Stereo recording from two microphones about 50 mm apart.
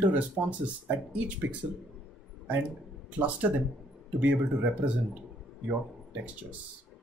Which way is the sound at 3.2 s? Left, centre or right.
Right.